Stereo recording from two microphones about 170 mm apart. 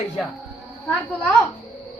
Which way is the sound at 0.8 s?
10° left (ahead or behind).